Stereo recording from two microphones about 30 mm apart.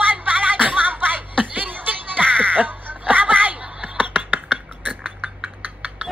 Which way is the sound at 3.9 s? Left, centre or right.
Right.